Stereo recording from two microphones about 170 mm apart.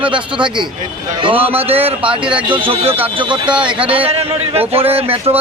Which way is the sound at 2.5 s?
30° right (ahead or behind).